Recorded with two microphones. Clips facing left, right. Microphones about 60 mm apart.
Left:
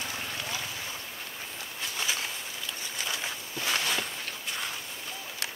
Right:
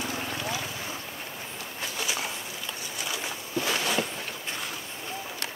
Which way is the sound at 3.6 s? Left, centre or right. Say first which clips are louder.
Right 2 dB; centre.